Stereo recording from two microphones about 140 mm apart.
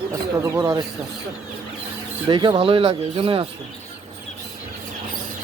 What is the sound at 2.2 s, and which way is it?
Speech, 35° right (ahead or behind).